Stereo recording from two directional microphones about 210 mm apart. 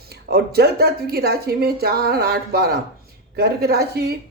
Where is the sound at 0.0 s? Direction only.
50° right (ahead or behind).